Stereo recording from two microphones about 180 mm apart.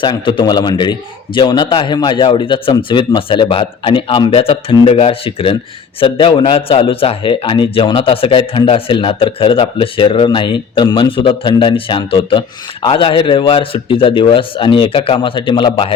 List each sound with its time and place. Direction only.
0.0 s speech: 25° left (ahead or behind)